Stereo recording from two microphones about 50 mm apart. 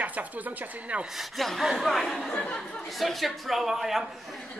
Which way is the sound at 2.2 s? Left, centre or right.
Left.